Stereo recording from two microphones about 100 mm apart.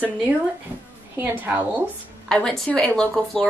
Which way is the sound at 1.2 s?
15° right (ahead or behind).